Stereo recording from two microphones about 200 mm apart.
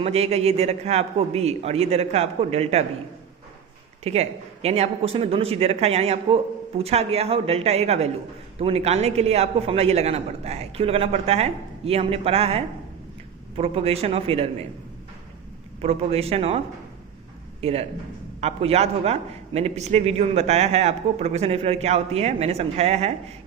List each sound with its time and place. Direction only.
0.0 s a man's voice: 30° right (ahead or behind)
4.0 s a man's voice: 30° right (ahead or behind)
15.8 s a man's voice: 30° right (ahead or behind)
17.6 s a man's voice: 30° right (ahead or behind)